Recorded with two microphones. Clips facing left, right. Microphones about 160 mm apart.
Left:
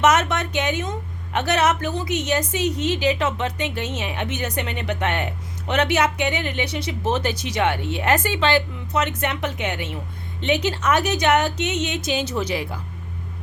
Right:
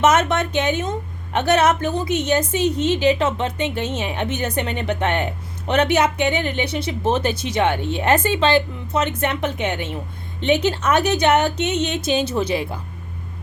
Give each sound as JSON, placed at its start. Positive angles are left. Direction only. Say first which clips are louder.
{"t": 0.0, "sound": "speech", "louder": "right 2 dB", "side_deg": -25}